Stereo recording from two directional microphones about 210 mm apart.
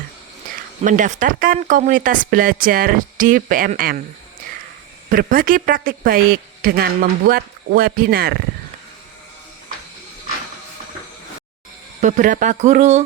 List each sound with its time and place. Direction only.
0.8 s speech: 35° right (ahead or behind)
5.0 s speech: 40° right (ahead or behind)
11.9 s speech: 35° right (ahead or behind)